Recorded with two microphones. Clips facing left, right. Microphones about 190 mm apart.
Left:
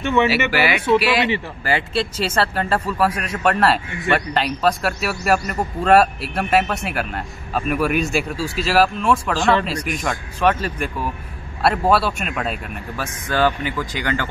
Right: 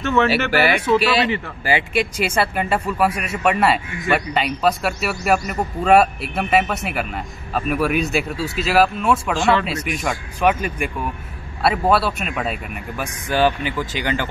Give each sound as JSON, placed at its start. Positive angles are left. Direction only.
{"t": 0.0, "sound": "speech", "side_deg": 15}
{"t": 0.3, "sound": "speech", "side_deg": -55}
{"t": 0.9, "sound": "speech", "side_deg": 15}
{"t": 1.6, "sound": "a man's voice", "side_deg": -15}